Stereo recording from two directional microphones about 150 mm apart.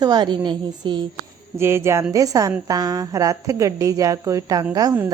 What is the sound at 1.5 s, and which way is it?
A woman's voice, 15° right (ahead or behind).